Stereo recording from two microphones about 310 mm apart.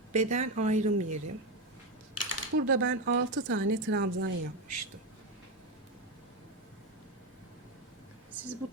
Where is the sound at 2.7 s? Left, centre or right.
Right.